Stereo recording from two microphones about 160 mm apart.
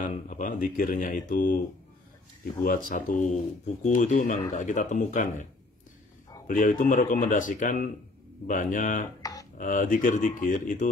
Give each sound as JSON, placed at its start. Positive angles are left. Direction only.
{"t": 0.0, "sound": "speech", "side_deg": 50}
{"t": 2.6, "sound": "speech", "side_deg": 60}
{"t": 9.2, "sound": "a sound", "side_deg": 20}
{"t": 9.6, "sound": "speech", "side_deg": 55}